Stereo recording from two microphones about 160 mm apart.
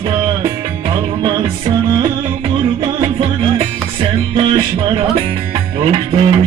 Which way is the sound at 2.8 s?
35° right (ahead or behind).